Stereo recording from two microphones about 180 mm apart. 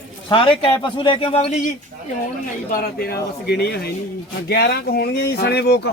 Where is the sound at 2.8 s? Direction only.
55° left (ahead or behind).